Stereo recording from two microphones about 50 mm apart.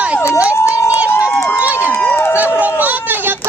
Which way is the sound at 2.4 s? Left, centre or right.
Right.